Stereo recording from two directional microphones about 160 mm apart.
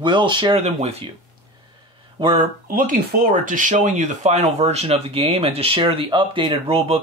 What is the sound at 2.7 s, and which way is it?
Speech, 60° right (ahead or behind).